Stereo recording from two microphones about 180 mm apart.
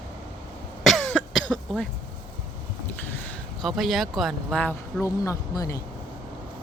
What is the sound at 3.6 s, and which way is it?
Speech, centre (ahead or behind).